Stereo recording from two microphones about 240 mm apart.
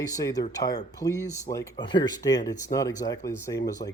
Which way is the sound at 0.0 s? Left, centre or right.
Centre.